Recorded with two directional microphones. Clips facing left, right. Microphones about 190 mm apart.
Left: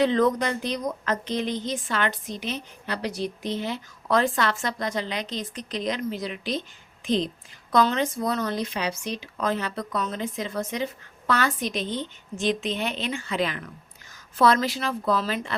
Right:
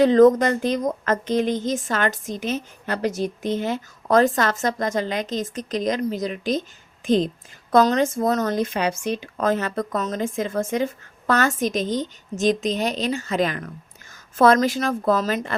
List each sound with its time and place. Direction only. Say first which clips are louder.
0.0 s speech: right 8 dB; 45° right (ahead or behind)